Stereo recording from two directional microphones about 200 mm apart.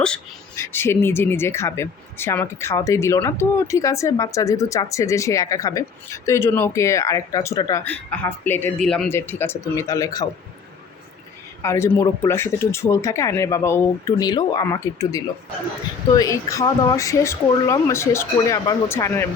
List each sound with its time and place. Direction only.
0.0 s speech: 10° left (ahead or behind)
11.6 s speech: 15° left (ahead or behind)